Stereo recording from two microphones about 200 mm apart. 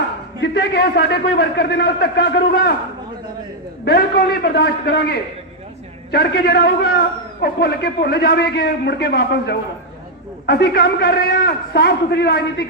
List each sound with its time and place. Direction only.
0.4 s a man's voice: 55° left (ahead or behind)
3.8 s a man's voice: 50° left (ahead or behind)